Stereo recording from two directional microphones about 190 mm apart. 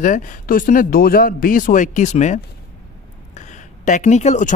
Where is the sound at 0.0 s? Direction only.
45° left (ahead or behind).